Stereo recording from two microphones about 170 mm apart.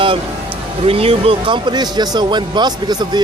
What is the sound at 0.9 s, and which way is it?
Speech, 35° right (ahead or behind).